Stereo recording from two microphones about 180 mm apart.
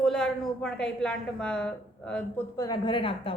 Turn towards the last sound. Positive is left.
turn(degrees=30)  # may be behind; listen again after turning